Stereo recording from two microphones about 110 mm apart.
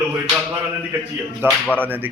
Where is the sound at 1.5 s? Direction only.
10° left (ahead or behind).